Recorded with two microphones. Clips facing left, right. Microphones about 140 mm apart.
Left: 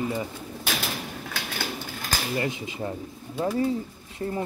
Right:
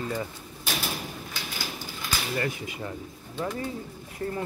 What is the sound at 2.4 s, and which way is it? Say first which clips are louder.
Speech: left 2 dB; 25° left (ahead or behind).